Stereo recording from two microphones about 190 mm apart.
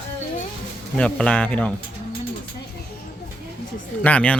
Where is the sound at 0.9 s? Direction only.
5° left (ahead or behind).